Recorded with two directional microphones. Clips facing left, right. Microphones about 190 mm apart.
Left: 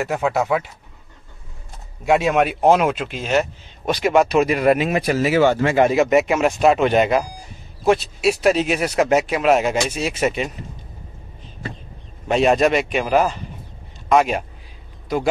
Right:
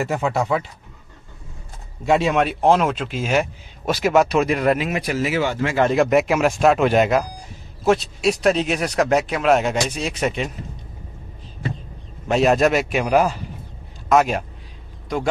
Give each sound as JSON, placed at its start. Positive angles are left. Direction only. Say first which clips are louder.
{"t": 0.0, "sound": "speech", "louder": "left 1 dB", "side_deg": 0}
{"t": 2.0, "sound": "speech", "louder": "left 1 dB", "side_deg": 5}
{"t": 3.1, "sound": "speech", "louder": "left 1 dB", "side_deg": -10}
{"t": 4.9, "sound": "speech", "louder": "left 4 dB", "side_deg": 40}
{"t": 5.9, "sound": "speech", "louder": "left 1 dB", "side_deg": 0}
{"t": 12.3, "sound": "speech", "louder": "even", "side_deg": 0}